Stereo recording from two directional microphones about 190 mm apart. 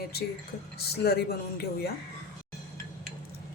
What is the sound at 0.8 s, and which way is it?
Speech, 55° left (ahead or behind).